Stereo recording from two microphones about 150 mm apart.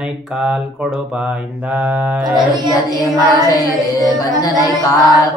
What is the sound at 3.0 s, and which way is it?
Mantra, 25° left (ahead or behind).